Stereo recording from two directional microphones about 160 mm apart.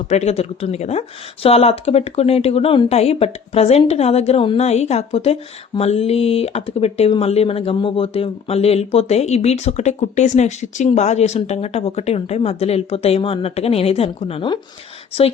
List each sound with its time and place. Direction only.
0.1 s speech: 40° left (ahead or behind)